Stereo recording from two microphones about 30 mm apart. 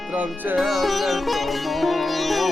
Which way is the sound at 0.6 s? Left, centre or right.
Centre.